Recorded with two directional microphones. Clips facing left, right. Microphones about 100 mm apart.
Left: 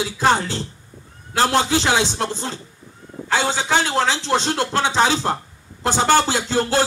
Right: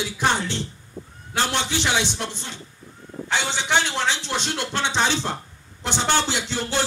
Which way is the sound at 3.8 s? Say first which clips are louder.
Left 5 dB; 40° left (ahead or behind).